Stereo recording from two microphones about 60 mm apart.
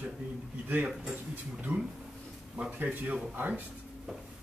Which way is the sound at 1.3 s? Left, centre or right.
Right.